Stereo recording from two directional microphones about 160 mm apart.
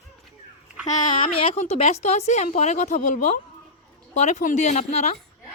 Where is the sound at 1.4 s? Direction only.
40° left (ahead or behind).